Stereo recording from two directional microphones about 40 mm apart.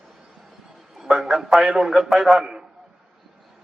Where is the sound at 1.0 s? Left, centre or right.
Centre.